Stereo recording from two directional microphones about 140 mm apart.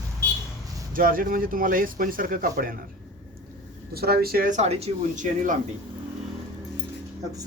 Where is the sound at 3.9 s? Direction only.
90° right; by 5.2 s 50° right (ahead or behind).